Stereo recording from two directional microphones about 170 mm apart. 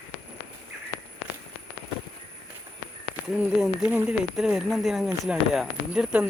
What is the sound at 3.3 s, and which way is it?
Speech, 5° right (ahead or behind).